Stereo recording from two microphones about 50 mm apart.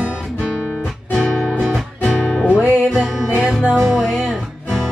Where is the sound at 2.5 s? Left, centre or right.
Centre.